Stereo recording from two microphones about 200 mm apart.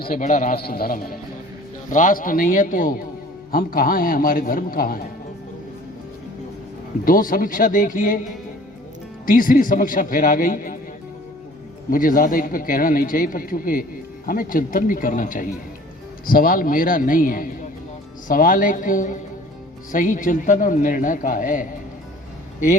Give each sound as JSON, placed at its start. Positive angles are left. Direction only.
{"t": 0.0, "sound": "speech", "side_deg": 45}
{"t": 7.0, "sound": "speech", "side_deg": 45}
{"t": 9.2, "sound": "speech", "side_deg": 45}
{"t": 11.9, "sound": "a man's voice", "side_deg": 45}